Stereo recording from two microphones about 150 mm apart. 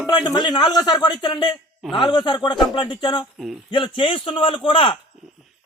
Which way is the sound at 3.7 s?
35° left (ahead or behind).